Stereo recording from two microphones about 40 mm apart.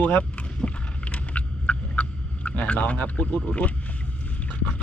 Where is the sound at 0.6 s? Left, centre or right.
Left.